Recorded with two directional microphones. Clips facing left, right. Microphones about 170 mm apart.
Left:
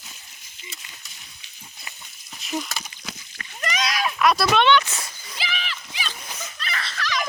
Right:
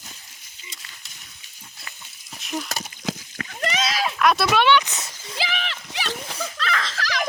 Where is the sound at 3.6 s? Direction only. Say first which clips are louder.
Right 1 dB; 30° right (ahead or behind).